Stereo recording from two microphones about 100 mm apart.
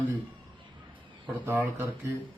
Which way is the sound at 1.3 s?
20° right (ahead or behind).